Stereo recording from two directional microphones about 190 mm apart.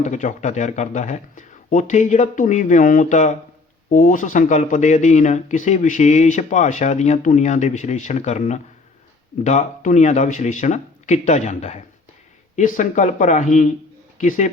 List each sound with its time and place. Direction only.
0.0 s speech: 40° left (ahead or behind)